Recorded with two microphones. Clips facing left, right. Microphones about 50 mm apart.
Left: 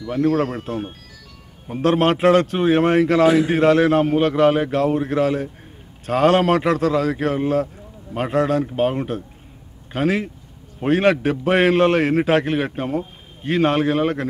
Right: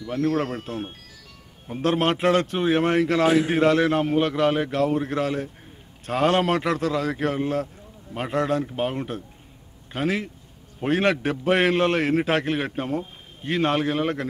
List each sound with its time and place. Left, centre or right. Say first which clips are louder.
0.4 s a man's voice: left 5 dB; centre